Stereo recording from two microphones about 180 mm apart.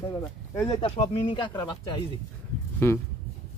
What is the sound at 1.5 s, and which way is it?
Speech, 15° left (ahead or behind).